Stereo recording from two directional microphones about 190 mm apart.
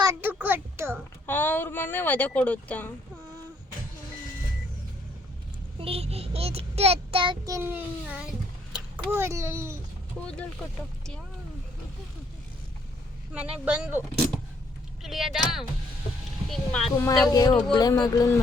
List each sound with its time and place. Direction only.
0.0 s a sound: 15° right (ahead or behind)
1.3 s speech: 10° left (ahead or behind)
5.8 s child singing: 30° right (ahead or behind); by 8.3 s 10° right (ahead or behind)
9.0 s a child's voice: 15° right (ahead or behind)
10.2 s speech: 5° left (ahead or behind)
13.3 s a child's voice: 5° right (ahead or behind)
15.0 s speech: centre (ahead or behind)
17.7 s speech: 20° left (ahead or behind)